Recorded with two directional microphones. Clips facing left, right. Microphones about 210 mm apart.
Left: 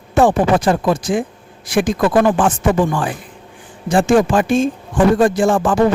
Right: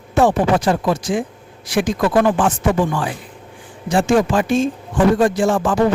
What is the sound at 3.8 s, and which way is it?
A man's voice, 50° left (ahead or behind).